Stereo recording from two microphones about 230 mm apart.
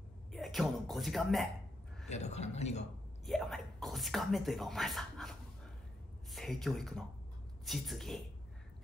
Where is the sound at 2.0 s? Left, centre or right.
Left.